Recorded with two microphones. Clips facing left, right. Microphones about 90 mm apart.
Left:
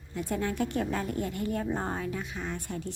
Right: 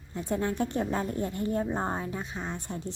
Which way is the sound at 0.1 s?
30° right (ahead or behind).